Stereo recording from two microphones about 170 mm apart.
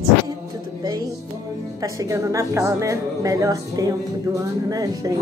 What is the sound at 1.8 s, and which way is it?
Speech, 20° right (ahead or behind).